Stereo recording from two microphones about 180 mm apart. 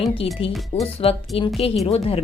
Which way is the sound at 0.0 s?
30° left (ahead or behind).